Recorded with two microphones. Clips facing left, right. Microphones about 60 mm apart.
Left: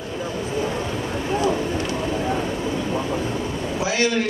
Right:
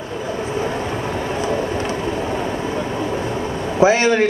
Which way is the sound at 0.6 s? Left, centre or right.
Right.